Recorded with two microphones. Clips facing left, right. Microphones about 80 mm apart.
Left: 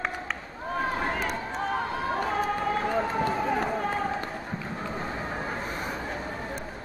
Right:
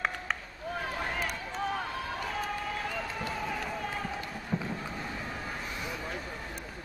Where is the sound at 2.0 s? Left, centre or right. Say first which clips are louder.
Left 8 dB; left.